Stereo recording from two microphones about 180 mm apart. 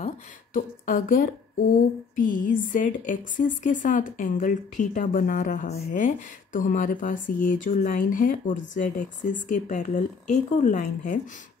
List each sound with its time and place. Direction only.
0.0 s speech: 45° left (ahead or behind)